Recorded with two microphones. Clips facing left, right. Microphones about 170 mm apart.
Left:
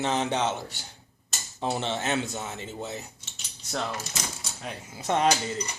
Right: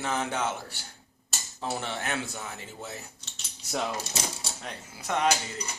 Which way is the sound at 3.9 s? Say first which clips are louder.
Right 2 dB; 30° right (ahead or behind).